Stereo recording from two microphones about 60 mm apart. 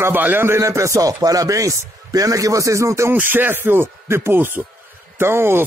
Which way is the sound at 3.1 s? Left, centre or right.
Right.